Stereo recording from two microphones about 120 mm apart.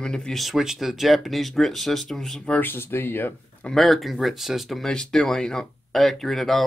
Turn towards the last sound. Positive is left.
turn(degrees=0)  # may be behind; listen again after turning